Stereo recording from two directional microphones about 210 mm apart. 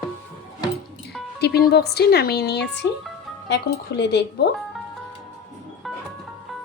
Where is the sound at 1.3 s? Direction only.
50° left (ahead or behind).